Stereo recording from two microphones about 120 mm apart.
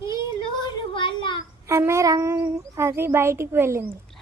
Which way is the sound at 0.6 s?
45° left (ahead or behind).